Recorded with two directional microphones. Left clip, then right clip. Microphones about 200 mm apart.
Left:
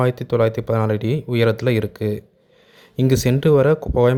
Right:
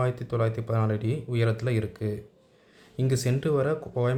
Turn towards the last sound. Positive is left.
turn(degrees=40)  # may be behind; listen again after turning